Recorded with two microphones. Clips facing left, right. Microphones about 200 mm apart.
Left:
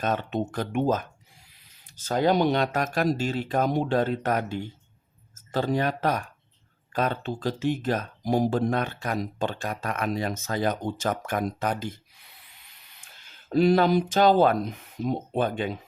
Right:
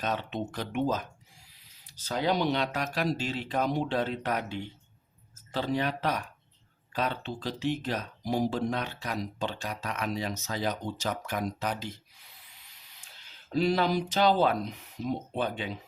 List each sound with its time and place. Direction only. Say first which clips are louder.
0.0 s speech: left 5 dB; 50° left (ahead or behind)